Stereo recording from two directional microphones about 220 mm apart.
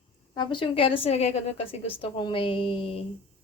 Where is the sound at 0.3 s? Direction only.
20° left (ahead or behind).